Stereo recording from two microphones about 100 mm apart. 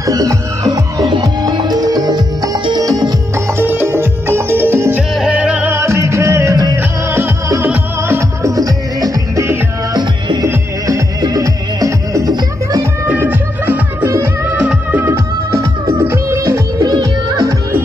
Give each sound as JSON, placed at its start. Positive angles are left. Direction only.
{"t": 0.0, "sound": "music", "side_deg": -35}
{"t": 1.1, "sound": "music", "side_deg": -45}
{"t": 3.3, "sound": "music", "side_deg": -25}
{"t": 5.1, "sound": "music", "side_deg": -10}
{"t": 5.7, "sound": "music", "side_deg": -30}
{"t": 6.8, "sound": "music", "side_deg": -25}
{"t": 7.6, "sound": "music", "side_deg": -15}
{"t": 8.2, "sound": "music", "side_deg": -30}
{"t": 9.9, "sound": "music", "side_deg": -45}
{"t": 10.4, "sound": "music", "side_deg": -30}
{"t": 13.0, "sound": "music", "side_deg": -20}
{"t": 14.0, "sound": "music", "side_deg": -30}
{"t": 14.4, "sound": "music", "side_deg": -15}
{"t": 16.0, "sound": "music", "side_deg": -25}